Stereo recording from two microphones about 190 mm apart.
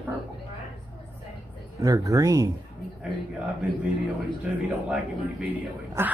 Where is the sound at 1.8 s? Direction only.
15° right (ahead or behind).